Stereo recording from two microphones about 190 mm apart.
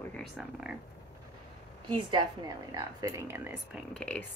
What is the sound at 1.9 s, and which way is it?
A woman's voice, 25° right (ahead or behind).